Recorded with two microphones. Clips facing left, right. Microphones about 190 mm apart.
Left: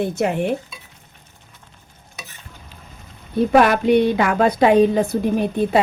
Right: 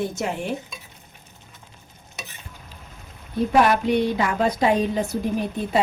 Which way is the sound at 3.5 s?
85° left.